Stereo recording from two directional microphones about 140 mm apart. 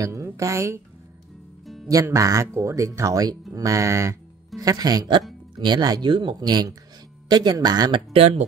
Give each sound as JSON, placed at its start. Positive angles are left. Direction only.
{"t": 0.0, "sound": "speech", "side_deg": -20}
{"t": 1.9, "sound": "speech", "side_deg": -25}
{"t": 8.1, "sound": "speech", "side_deg": -45}